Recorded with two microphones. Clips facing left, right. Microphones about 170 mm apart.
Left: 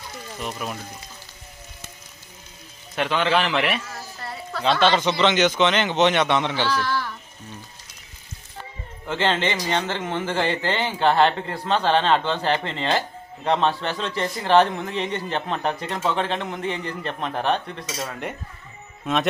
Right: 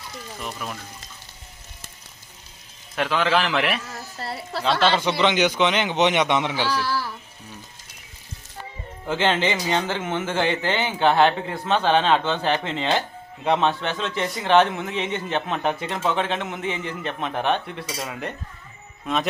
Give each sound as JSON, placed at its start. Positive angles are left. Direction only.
{"t": 2.9, "sound": "a man's voice", "side_deg": 0}
{"t": 4.2, "sound": "a sound", "side_deg": -30}
{"t": 4.6, "sound": "a man's voice", "side_deg": -5}
{"t": 9.0, "sound": "a man's voice", "side_deg": -5}
{"t": 19.0, "sound": "a man's voice", "side_deg": 0}